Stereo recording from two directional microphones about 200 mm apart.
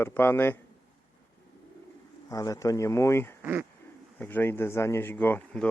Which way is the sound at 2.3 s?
15° left (ahead or behind).